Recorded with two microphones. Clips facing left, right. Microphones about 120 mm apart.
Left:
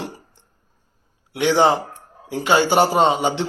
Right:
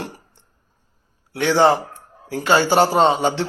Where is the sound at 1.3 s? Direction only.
15° left (ahead or behind).